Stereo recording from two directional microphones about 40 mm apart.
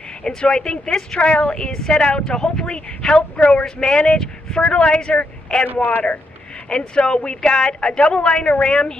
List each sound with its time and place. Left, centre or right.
0.2 s speech: centre
1.2 s a woman's voice: left
6.7 s a woman's voice: left